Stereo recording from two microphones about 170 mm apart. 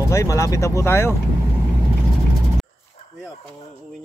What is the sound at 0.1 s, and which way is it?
Speech, 15° left (ahead or behind).